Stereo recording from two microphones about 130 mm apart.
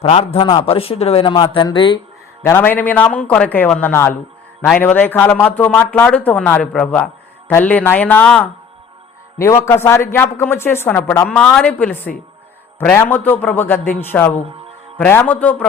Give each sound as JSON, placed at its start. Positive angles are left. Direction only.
{"t": 0.0, "sound": "speech", "side_deg": 50}
{"t": 1.2, "sound": "speech", "side_deg": 35}
{"t": 2.4, "sound": "a man's voice", "side_deg": 15}
{"t": 11.3, "sound": "a man's voice", "side_deg": 5}